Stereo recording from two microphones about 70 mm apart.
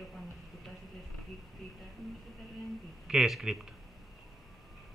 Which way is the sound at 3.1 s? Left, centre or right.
Centre.